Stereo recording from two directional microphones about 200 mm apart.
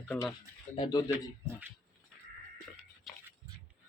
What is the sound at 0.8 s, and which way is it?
Speech, 20° left (ahead or behind).